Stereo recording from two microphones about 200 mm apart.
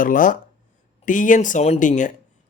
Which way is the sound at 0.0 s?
45° left (ahead or behind).